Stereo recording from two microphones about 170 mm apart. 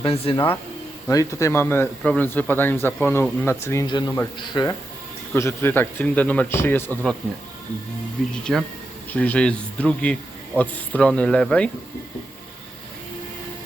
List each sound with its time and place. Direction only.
0.0 s speech: 30° left (ahead or behind)
1.0 s a man's voice: 20° left (ahead or behind)
3.8 s a man's voice: 25° left (ahead or behind)
5.3 s a man's voice: 15° left (ahead or behind)
8.2 s a man's voice: 5° left (ahead or behind)